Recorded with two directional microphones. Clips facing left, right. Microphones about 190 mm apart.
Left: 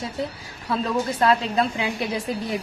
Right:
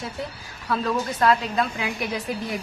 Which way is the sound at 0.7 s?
25° left (ahead or behind).